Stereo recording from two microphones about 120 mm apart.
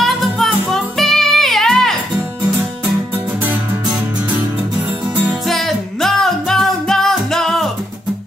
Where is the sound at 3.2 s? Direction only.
15° right (ahead or behind).